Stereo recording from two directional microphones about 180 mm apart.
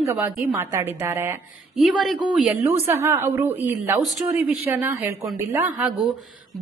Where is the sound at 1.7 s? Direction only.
Centre (ahead or behind).